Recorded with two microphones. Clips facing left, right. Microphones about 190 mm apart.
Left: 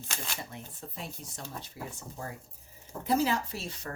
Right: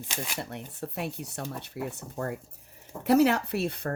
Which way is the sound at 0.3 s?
70° right (ahead or behind).